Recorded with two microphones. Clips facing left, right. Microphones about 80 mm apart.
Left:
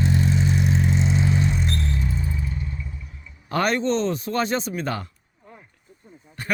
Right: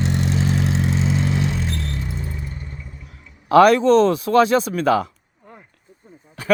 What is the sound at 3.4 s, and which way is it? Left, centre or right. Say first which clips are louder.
Speech: right 10 dB; right.